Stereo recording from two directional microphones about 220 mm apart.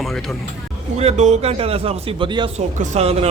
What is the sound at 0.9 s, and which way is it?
Speech, 30° right (ahead or behind).